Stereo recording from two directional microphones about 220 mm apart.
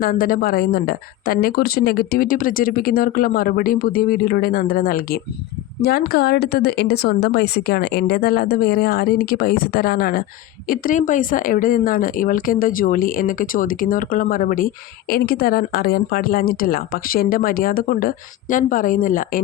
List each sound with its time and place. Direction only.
0.0 s a woman's voice: 40° left (ahead or behind)